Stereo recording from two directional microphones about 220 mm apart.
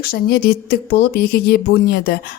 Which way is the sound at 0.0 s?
45° left (ahead or behind).